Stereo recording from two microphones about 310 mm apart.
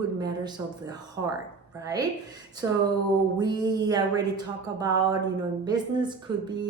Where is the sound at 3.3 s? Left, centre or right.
Centre.